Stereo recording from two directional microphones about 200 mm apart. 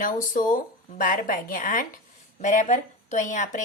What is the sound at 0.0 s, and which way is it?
A woman's voice, 40° left (ahead or behind).